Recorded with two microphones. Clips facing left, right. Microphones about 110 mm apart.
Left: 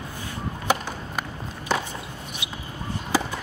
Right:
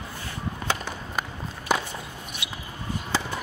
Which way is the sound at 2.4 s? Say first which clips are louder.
Even; 20° left (ahead or behind).